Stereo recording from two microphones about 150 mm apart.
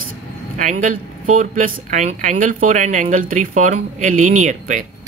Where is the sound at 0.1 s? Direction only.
60° right (ahead or behind).